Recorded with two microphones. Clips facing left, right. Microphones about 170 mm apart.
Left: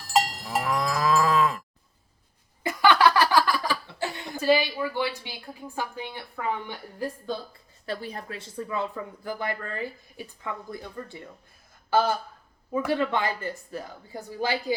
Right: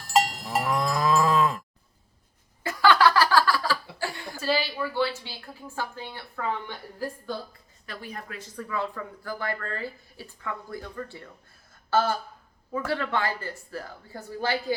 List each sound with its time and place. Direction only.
0.0 s cattle: centre (ahead or behind)
2.6 s chuckle: 20° left (ahead or behind)
7.9 s speech: 30° left (ahead or behind)
11.9 s a sound: 15° left (ahead or behind)
12.7 s a woman's voice: 15° left (ahead or behind)